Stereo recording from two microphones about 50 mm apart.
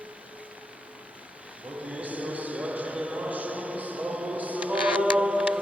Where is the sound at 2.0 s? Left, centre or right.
Right.